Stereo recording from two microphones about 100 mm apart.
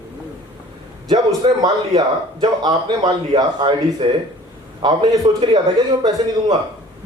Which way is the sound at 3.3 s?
50° right (ahead or behind).